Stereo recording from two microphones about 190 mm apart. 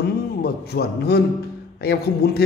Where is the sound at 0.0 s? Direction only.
55° left (ahead or behind).